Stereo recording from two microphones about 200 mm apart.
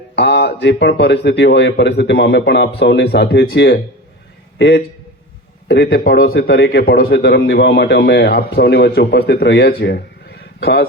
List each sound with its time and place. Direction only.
0.2 s a man's voice: 55° left (ahead or behind)